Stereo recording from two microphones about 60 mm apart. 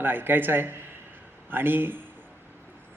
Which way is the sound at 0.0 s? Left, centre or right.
Right.